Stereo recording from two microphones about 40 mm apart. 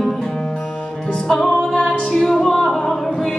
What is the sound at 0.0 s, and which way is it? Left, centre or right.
Music, centre.